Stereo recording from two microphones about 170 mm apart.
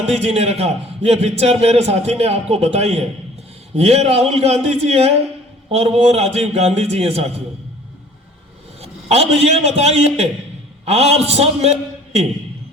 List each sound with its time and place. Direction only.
0.0 s a man's voice: 35° right (ahead or behind)
8.8 s a man's voice: 40° right (ahead or behind)